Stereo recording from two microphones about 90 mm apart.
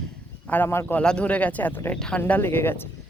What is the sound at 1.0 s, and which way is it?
Speech, 10° left (ahead or behind).